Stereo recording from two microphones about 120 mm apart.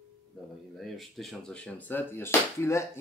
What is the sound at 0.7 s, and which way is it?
Speech, centre (ahead or behind).